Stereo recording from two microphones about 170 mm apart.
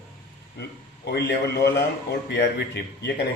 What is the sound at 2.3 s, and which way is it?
Speech, 90° left.